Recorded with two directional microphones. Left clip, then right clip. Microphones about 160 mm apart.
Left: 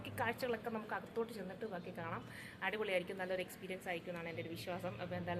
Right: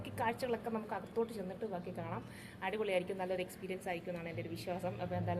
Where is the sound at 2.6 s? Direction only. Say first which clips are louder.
Right 2 dB; centre (ahead or behind).